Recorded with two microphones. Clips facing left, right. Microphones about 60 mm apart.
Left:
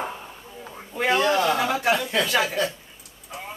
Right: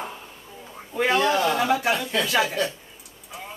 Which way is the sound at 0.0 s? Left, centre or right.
Centre.